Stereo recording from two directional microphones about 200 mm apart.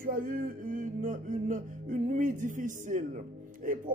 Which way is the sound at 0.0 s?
45° right (ahead or behind).